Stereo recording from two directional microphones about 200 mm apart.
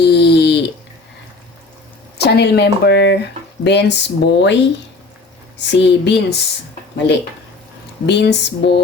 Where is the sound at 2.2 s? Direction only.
55° left (ahead or behind).